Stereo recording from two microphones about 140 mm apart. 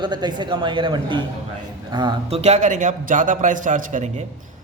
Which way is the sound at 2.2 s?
50° right (ahead or behind).